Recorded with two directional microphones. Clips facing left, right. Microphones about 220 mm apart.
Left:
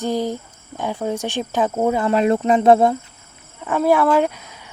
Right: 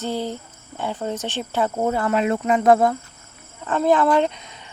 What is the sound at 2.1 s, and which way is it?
Speech, 35° left (ahead or behind).